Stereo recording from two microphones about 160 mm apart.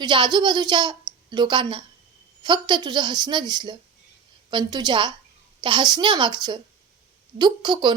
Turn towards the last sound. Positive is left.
turn(degrees=-25)  # may be behind; listen again after turning